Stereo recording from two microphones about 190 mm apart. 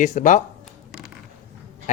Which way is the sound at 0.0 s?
40° left (ahead or behind).